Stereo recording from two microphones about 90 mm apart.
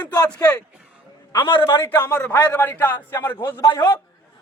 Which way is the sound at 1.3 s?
60° left (ahead or behind).